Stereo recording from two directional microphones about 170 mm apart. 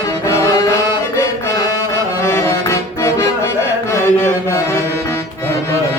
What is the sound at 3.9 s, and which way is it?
Mantra, 15° left (ahead or behind).